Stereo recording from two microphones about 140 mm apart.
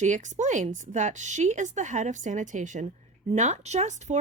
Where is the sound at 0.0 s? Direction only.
60° right (ahead or behind).